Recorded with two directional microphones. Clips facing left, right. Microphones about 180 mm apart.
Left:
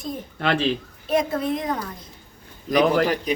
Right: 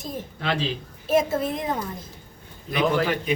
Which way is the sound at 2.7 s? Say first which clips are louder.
Left 4 dB; 40° left (ahead or behind).